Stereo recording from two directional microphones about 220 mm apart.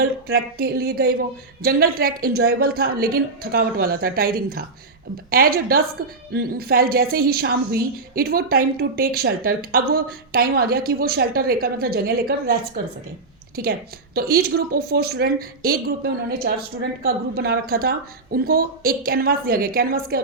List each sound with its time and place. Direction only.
0.0 s a woman's voice: 45° right (ahead or behind)
14.2 s a woman's voice: 45° right (ahead or behind)